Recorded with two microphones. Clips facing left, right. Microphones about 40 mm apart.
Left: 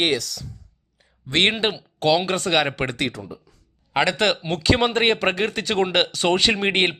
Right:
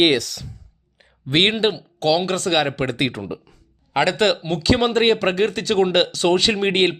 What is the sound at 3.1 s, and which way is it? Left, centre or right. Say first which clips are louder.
Speech: right 6 dB; right.